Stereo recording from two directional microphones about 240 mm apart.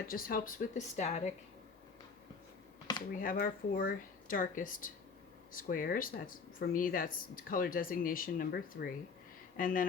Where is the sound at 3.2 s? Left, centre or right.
Left.